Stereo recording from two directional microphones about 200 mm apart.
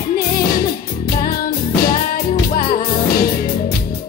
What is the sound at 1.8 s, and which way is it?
Music, 50° left (ahead or behind).